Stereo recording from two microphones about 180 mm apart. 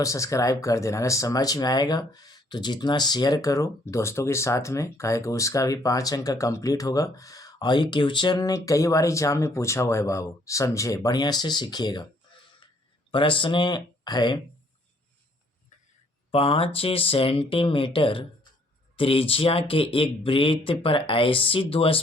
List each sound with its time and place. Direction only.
0.0 s speech: 20° left (ahead or behind)
13.1 s speech: 30° left (ahead or behind)
16.3 s speech: 30° left (ahead or behind)